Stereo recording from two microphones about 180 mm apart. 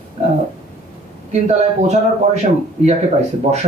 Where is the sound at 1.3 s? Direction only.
40° right (ahead or behind).